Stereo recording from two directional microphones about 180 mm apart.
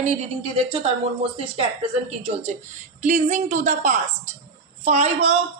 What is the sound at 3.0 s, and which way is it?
A woman's voice, 45° right (ahead or behind).